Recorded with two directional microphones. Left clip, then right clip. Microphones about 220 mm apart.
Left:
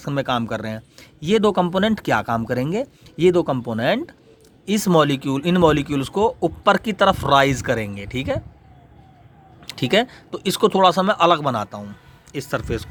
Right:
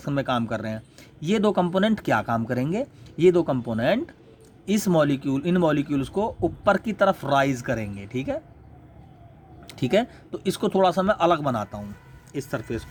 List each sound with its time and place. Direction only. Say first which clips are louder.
0.0 s speech: left 3 dB; 25° left (ahead or behind)
9.6 s speech: left 4 dB; 25° left (ahead or behind)